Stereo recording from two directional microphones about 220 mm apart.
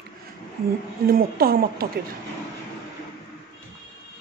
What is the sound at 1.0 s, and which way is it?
Speech, 45° right (ahead or behind).